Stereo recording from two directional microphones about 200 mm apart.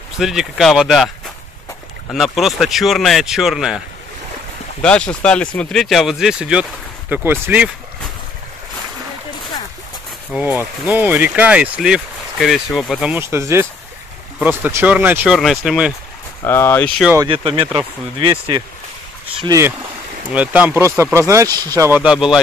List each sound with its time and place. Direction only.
0.2 s speech: centre (ahead or behind)
4.8 s speech: 5° left (ahead or behind)
10.9 s speech: 10° right (ahead or behind)
16.4 s speech: 10° left (ahead or behind)
17.3 s speech: 25° right (ahead or behind); by 22.4 s 5° right (ahead or behind)